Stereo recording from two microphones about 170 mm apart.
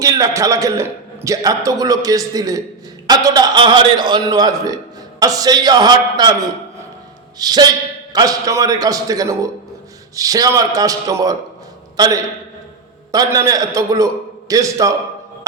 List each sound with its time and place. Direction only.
0.0 s a man's voice: 20° right (ahead or behind)
7.3 s a man's voice: 25° right (ahead or behind)